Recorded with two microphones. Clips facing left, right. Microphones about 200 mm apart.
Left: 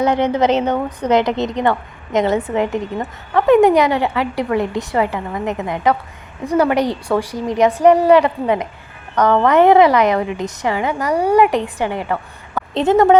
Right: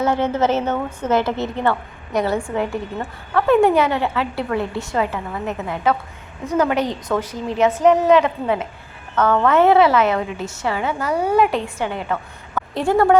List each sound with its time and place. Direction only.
0.0 s a woman's voice: 15° left (ahead or behind)